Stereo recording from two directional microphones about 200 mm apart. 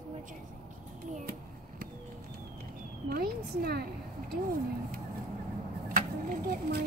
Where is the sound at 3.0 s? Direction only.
50° right (ahead or behind).